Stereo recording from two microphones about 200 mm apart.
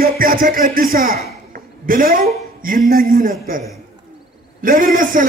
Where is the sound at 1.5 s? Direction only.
45° right (ahead or behind).